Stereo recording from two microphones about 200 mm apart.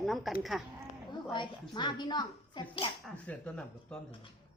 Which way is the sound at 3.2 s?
5° left (ahead or behind).